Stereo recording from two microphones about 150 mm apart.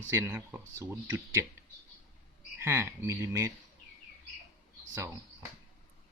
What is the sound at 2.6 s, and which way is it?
Speech, 15° right (ahead or behind).